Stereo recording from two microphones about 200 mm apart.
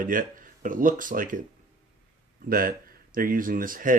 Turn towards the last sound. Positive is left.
turn(degrees=-45)  # may be behind; listen again after turning